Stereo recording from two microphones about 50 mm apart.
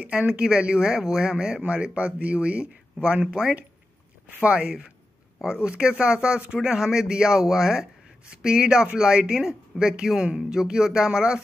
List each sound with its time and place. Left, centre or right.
0.0 s speech: right
0.3 s speech: centre
1.6 s speech: right